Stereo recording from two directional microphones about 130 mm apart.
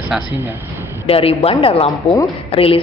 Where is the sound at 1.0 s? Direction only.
50° left (ahead or behind).